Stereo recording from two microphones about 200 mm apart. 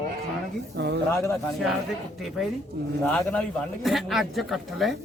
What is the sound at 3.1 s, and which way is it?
Speech, 5° left (ahead or behind).